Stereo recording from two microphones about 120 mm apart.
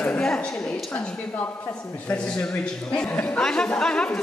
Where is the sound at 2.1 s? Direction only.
10° left (ahead or behind).